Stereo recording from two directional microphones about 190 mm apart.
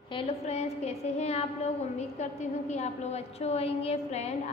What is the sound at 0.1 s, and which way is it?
A woman's voice, 30° left (ahead or behind).